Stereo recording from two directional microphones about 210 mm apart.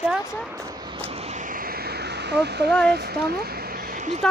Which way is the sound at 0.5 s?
15° right (ahead or behind).